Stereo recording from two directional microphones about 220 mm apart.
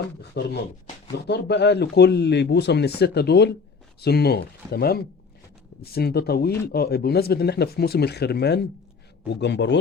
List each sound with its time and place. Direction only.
0.4 s speech: 45° left (ahead or behind)